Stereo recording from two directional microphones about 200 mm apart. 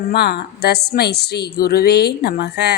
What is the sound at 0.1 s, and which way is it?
A woman's voice, 55° left (ahead or behind).